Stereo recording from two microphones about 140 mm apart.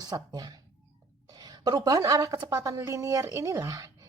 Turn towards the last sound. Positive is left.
turn(degrees=-20)  # may be behind; listen again after turning